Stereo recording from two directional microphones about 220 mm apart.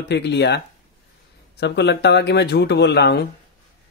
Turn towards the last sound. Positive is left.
turn(degrees=45)  # may be behind; listen again after turning